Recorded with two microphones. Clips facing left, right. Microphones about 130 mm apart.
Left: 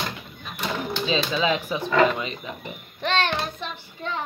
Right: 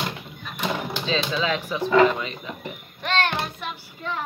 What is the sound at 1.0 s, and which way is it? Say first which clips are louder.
Speech: left 2 dB; 15° left (ahead or behind).